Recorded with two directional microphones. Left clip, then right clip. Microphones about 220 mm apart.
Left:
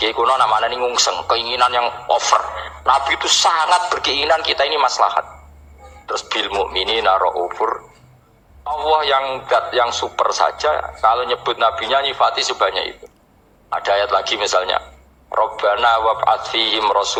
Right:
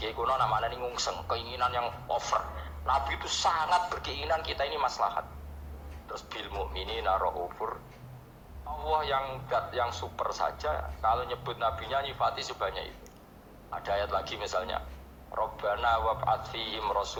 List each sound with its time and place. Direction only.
0.0 s a man's voice: 50° left (ahead or behind)